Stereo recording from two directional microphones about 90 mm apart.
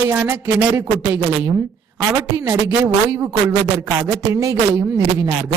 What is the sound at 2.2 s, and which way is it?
A woman's voice, 35° right (ahead or behind).